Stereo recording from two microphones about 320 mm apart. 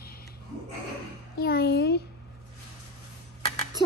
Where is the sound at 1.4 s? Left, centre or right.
Left.